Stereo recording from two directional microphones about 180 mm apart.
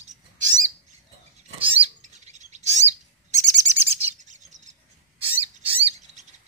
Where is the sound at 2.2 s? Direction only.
40° right (ahead or behind).